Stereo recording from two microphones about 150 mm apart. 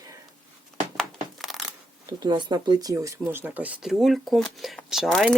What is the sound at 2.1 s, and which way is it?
Speech, 30° right (ahead or behind).